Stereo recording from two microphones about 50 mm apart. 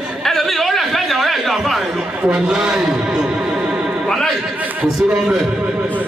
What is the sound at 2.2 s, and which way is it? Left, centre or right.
Music, centre.